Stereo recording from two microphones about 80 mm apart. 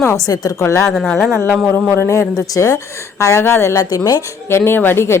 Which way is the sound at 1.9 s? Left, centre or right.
Left.